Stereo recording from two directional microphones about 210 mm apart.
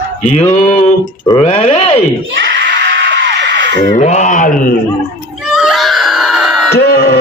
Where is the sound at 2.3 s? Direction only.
55° right (ahead or behind).